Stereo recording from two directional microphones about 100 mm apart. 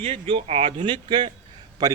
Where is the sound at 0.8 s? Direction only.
50° right (ahead or behind).